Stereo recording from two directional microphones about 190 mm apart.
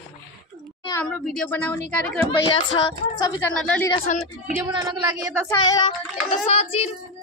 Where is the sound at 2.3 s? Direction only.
25° left (ahead or behind).